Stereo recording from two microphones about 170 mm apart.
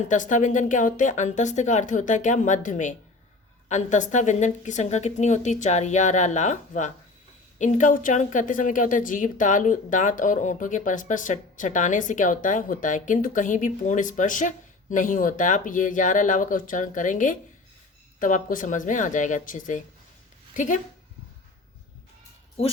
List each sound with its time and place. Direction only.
0.1 s a woman's voice: 50° left (ahead or behind)
22.6 s speech: 35° left (ahead or behind)